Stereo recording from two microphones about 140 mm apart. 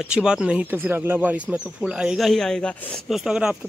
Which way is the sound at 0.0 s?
5° right (ahead or behind).